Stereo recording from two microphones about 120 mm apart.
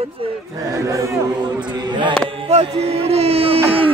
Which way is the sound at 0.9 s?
25° right (ahead or behind).